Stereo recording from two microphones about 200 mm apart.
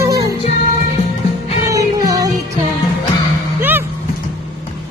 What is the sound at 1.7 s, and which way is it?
Music, 15° right (ahead or behind).